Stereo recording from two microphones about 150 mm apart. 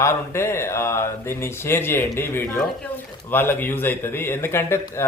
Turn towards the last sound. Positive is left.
turn(degrees=15)  # may be behind; listen again after turning